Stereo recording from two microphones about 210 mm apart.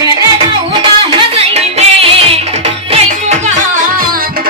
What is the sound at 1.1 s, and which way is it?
Music, 30° right (ahead or behind).